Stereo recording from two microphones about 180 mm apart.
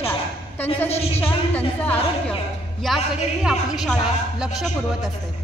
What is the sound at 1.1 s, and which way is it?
A woman's voice, 10° left (ahead or behind).